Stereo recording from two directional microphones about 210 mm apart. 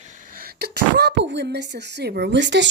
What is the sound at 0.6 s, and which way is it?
Speech, 50° right (ahead or behind).